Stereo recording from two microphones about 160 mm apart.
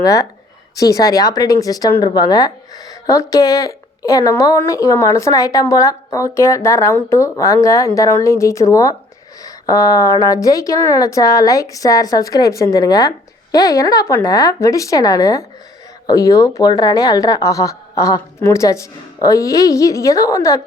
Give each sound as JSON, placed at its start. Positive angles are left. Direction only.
{"t": 0.0, "sound": "a woman's voice", "side_deg": 20}